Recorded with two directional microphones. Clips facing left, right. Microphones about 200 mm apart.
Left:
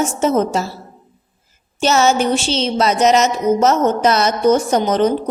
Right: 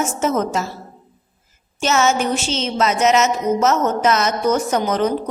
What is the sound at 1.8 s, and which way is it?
A woman's voice, 35° left (ahead or behind).